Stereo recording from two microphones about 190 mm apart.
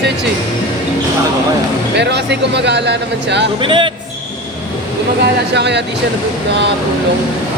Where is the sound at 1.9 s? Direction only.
65° right (ahead or behind).